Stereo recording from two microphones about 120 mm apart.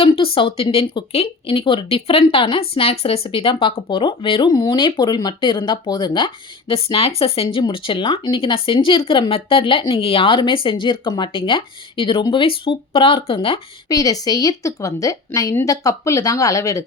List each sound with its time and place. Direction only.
0.0 s speech: 50° left (ahead or behind)
13.8 s speech: 30° left (ahead or behind)